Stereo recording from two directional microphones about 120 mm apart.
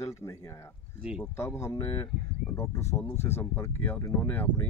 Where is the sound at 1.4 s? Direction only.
20° left (ahead or behind).